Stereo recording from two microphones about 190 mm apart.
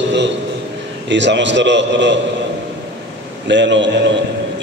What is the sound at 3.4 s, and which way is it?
Speech, 70° right (ahead or behind).